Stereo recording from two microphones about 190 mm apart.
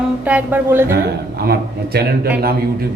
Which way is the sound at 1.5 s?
55° right (ahead or behind).